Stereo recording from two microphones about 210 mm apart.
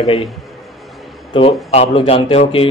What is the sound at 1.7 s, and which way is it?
Speech, 30° left (ahead or behind).